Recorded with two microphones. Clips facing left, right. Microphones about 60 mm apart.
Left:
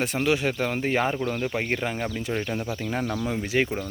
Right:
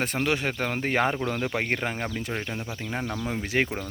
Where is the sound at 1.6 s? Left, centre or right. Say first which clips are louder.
Left 1 dB; right.